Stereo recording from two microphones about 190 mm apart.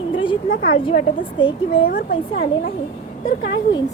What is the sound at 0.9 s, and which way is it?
Speech, 25° left (ahead or behind).